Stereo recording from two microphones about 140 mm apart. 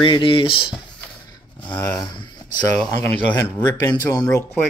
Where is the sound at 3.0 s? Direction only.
15° left (ahead or behind).